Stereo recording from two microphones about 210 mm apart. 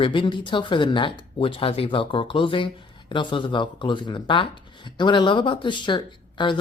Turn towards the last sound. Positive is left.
turn(degrees=20)  # may be behind; listen again after turning